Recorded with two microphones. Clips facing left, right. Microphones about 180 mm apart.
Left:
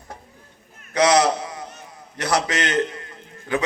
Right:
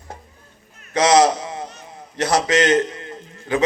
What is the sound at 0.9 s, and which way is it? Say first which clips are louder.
Speech: right 3 dB; 25° right (ahead or behind).